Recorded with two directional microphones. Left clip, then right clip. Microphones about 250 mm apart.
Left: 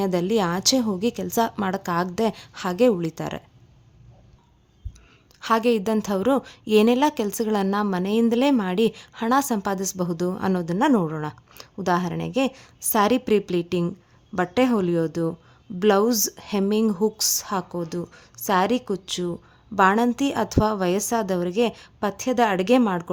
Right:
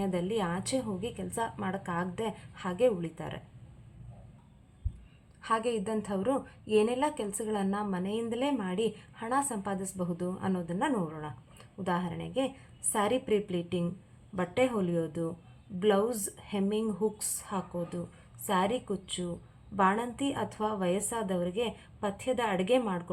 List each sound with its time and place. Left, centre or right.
0.0 s a woman's voice: left
5.4 s a woman's voice: left